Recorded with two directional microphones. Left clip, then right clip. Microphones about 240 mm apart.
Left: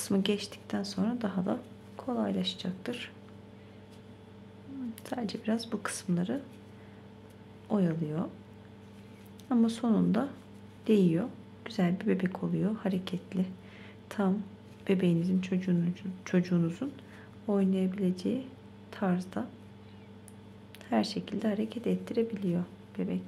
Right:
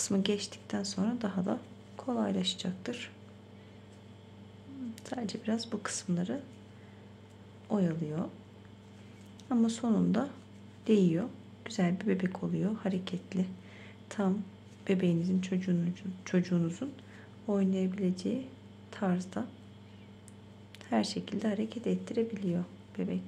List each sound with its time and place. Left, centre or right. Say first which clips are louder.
0.0 s speech: left 1 dB; centre
5.0 s speech: left 2 dB; centre
7.7 s speech: left 2 dB; centre
9.5 s speech: left 2 dB; centre
20.9 s speech: left 1 dB; centre